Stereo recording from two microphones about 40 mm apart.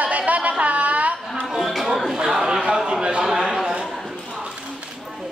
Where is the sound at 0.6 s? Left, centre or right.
Right.